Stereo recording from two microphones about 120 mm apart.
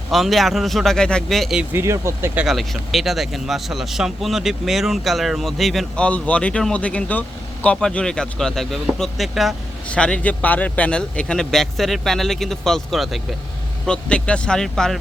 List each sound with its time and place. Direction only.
0.1 s speech: centre (ahead or behind)
1.7 s speech: 25° right (ahead or behind)
2.4 s speech: centre (ahead or behind)
6.1 s speech: 10° left (ahead or behind)